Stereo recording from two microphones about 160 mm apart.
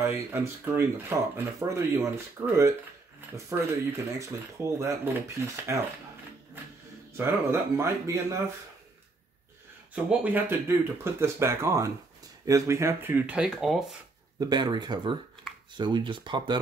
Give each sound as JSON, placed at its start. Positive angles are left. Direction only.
{"t": 0.0, "sound": "speech", "side_deg": -15}
{"t": 7.2, "sound": "speech", "side_deg": -15}
{"t": 9.9, "sound": "speech", "side_deg": -10}
{"t": 14.4, "sound": "speech", "side_deg": -25}